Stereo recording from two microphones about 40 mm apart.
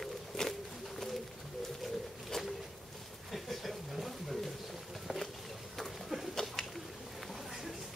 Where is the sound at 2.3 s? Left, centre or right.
Centre.